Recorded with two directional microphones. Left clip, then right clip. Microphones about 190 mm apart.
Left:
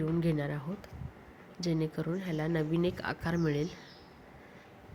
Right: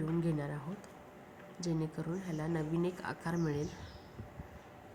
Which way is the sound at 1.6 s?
20° left (ahead or behind).